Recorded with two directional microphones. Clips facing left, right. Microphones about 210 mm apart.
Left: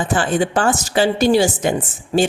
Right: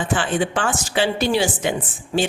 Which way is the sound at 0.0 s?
40° left (ahead or behind).